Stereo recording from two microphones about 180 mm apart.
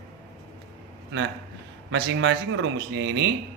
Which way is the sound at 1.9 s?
90° right.